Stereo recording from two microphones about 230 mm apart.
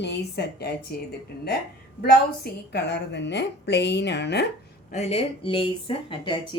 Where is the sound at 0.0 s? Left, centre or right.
Left.